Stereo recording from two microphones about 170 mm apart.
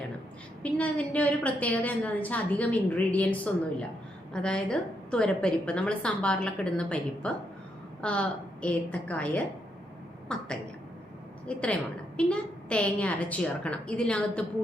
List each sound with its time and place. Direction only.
0.6 s a woman's voice: 10° left (ahead or behind)